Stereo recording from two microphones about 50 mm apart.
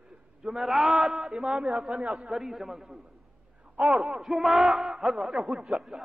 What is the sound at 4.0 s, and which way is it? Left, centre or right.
A man's voice, centre.